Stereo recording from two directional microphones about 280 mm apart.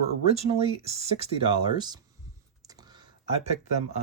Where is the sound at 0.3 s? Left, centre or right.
Right.